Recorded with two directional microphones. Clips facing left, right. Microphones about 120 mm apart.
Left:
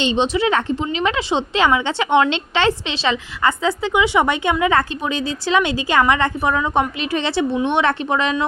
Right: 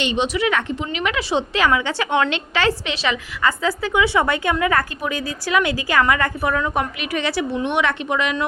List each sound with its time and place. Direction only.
0.0 s a woman's voice: 30° left (ahead or behind)